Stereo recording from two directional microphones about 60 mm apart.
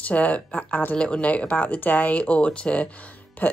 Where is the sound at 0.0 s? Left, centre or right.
Left.